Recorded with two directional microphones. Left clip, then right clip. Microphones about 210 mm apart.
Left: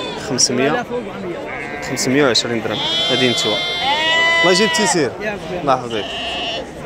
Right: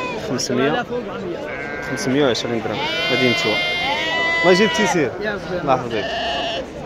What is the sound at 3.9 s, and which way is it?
Sheep, 40° left (ahead or behind).